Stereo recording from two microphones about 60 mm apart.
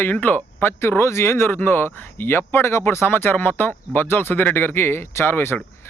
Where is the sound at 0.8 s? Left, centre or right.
Left.